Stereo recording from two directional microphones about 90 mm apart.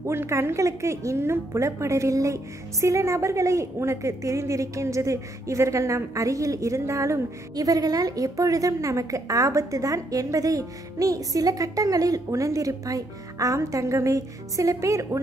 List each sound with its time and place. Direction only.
0.0 s a woman's voice: 30° right (ahead or behind)